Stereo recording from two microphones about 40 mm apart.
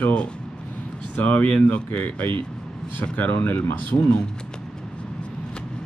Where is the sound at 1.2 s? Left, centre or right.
Left.